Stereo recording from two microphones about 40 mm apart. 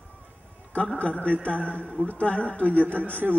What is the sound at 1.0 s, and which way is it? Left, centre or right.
Speech, left.